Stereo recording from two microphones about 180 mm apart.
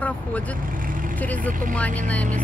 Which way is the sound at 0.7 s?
50° right (ahead or behind).